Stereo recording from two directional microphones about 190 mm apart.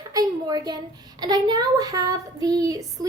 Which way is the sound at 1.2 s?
20° right (ahead or behind).